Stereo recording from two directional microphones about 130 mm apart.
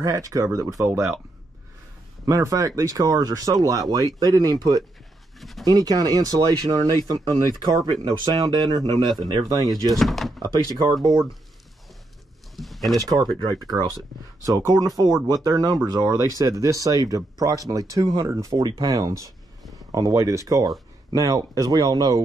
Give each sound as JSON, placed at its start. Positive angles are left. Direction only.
{"t": 0.0, "sound": "speech", "side_deg": -25}
{"t": 2.2, "sound": "speech", "side_deg": -25}
{"t": 5.4, "sound": "speech", "side_deg": 0}
{"t": 5.7, "sound": "speech", "side_deg": -30}
{"t": 9.9, "sound": "speech", "side_deg": 0}
{"t": 10.4, "sound": "speech", "side_deg": -30}
{"t": 12.5, "sound": "a sound", "side_deg": 0}
{"t": 13.1, "sound": "speech", "side_deg": -30}